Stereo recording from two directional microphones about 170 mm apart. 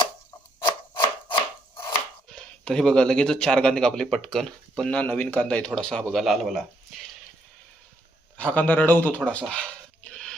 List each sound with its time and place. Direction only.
0.6 s scissors: 30° left (ahead or behind)
2.3 s speech: 5° left (ahead or behind)
8.4 s speech: 10° left (ahead or behind)